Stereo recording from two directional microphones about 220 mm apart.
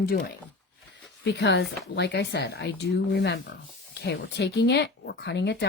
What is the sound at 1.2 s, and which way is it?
Speech, 50° left (ahead or behind).